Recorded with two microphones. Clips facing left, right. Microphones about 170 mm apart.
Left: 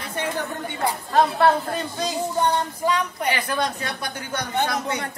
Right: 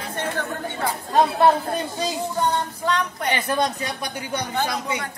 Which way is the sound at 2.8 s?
10° left (ahead or behind).